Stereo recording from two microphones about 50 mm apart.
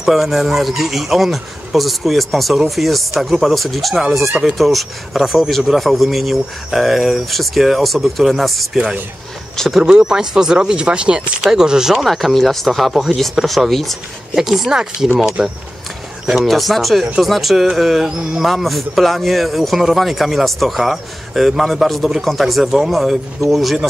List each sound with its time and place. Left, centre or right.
0.0 s a man's voice: centre
9.8 s a man's voice: centre
14.4 s speech: centre
16.4 s a man's voice: centre